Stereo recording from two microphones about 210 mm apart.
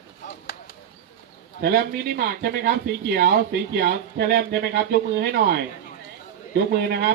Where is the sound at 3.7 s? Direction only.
50° right (ahead or behind).